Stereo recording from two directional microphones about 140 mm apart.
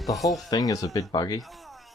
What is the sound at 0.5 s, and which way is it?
Speech, 25° left (ahead or behind).